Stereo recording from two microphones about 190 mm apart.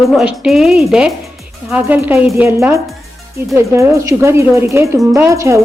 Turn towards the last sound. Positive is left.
turn(degrees=-15)  # may be behind; listen again after turning